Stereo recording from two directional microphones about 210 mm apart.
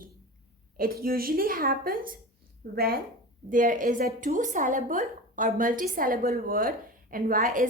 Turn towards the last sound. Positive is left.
turn(degrees=-40)  # may be behind; listen again after turning